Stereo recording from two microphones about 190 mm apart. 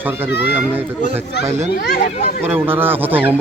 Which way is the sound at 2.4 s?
10° right (ahead or behind).